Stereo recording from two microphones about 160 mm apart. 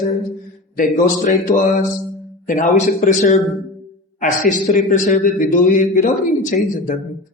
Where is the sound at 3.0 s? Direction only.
45° left (ahead or behind).